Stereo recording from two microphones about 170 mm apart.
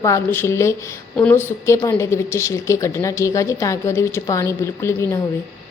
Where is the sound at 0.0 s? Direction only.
15° left (ahead or behind).